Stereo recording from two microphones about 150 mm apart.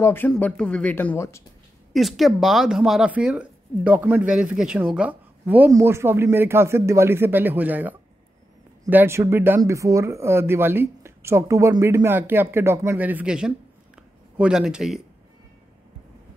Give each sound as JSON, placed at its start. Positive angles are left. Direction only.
{"t": 0.0, "sound": "speech", "side_deg": 15}
{"t": 2.0, "sound": "speech", "side_deg": 0}